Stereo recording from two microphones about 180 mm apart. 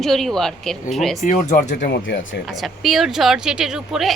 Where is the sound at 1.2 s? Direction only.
45° left (ahead or behind).